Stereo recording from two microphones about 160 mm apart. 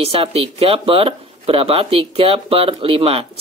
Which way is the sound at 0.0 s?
40° right (ahead or behind).